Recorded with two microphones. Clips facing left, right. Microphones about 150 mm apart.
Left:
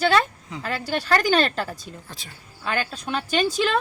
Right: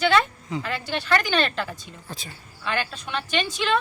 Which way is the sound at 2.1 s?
Centre (ahead or behind).